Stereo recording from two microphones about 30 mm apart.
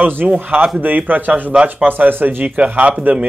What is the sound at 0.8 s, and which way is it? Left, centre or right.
Speech, right.